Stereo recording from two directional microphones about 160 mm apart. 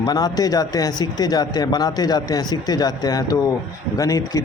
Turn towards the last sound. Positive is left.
turn(degrees=20)  # may be behind; listen again after turning